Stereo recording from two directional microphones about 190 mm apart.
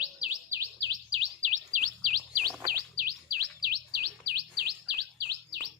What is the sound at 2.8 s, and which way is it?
Bird, 50° right (ahead or behind).